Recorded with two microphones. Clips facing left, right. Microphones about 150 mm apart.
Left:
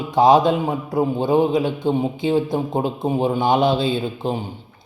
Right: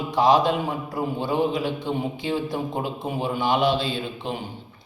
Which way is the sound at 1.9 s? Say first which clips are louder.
Left 7 dB; 30° left (ahead or behind).